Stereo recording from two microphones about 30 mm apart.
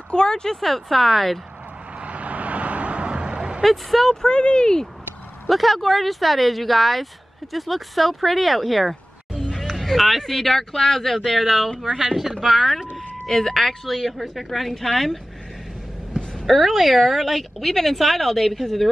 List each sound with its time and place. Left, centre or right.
0.1 s speech: left
0.6 s speech: centre
2.0 s vehicle: right
3.6 s speech: centre
4.3 s speech: left
5.5 s speech: centre
11.1 s speech: centre
13.3 s speech: centre
16.4 s speech: centre